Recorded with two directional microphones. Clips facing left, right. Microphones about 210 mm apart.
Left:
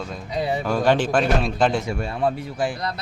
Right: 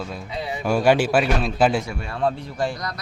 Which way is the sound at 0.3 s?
45° left (ahead or behind).